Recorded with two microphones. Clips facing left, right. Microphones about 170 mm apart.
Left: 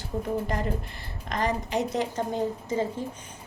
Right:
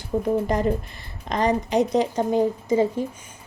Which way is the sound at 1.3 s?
20° right (ahead or behind).